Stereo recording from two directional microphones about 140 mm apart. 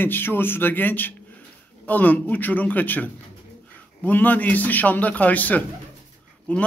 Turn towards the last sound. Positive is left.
turn(degrees=10)  # may be behind; listen again after turning